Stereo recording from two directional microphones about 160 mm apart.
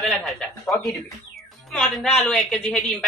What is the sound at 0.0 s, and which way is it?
A woman's voice, 5° left (ahead or behind).